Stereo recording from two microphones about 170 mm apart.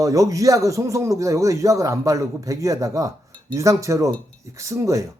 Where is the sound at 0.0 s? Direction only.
20° right (ahead or behind).